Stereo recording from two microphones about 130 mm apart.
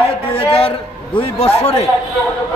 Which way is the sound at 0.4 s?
45° left (ahead or behind).